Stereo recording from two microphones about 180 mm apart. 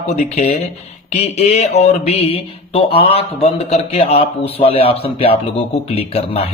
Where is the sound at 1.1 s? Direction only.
40° left (ahead or behind).